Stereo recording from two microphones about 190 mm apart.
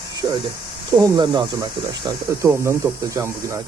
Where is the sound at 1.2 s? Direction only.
20° right (ahead or behind).